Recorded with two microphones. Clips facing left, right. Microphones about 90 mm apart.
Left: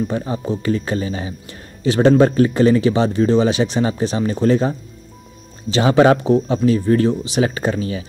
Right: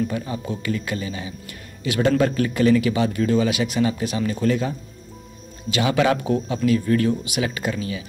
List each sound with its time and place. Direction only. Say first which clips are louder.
0.0 s speech: left 4 dB; 30° left (ahead or behind)